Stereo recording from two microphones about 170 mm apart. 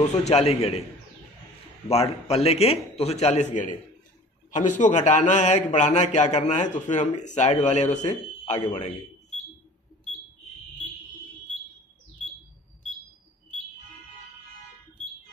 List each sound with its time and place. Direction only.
0.0 s a man's voice: 40° left (ahead or behind)
1.9 s a man's voice: 35° left (ahead or behind)
4.5 s a man's voice: 45° left (ahead or behind)